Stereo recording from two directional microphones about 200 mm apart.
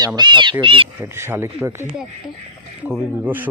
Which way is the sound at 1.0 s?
10° right (ahead or behind).